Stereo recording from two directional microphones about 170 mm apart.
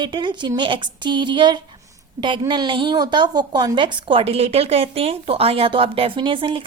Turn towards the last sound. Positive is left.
turn(degrees=-30)  # may be behind; listen again after turning